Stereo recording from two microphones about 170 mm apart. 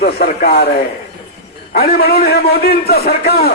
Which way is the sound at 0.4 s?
70° left (ahead or behind).